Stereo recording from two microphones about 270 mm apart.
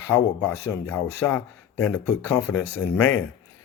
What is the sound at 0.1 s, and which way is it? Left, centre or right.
Speech, left.